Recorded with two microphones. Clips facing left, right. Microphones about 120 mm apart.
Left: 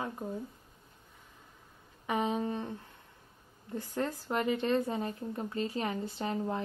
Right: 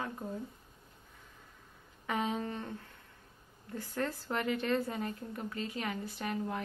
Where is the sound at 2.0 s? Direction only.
15° left (ahead or behind).